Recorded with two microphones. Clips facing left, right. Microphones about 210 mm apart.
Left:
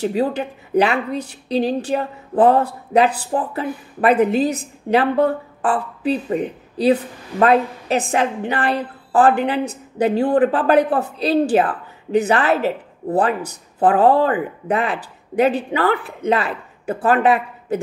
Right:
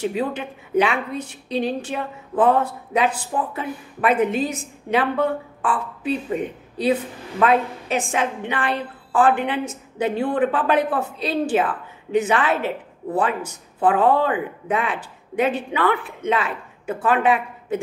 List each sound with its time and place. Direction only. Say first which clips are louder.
0.0 s a woman's voice: left 4 dB; 35° left (ahead or behind)
7.3 s a woman's voice: left 3 dB; 35° left (ahead or behind)